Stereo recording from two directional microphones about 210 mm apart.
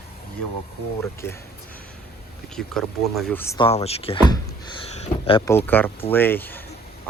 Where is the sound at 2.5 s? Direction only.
Centre (ahead or behind).